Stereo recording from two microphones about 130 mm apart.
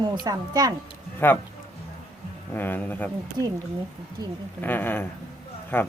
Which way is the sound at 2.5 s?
15° left (ahead or behind).